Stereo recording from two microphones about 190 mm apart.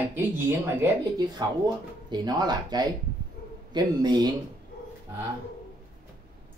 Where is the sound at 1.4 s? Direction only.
20° right (ahead or behind).